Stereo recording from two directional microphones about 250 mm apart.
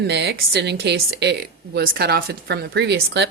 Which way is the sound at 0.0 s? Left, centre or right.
Right.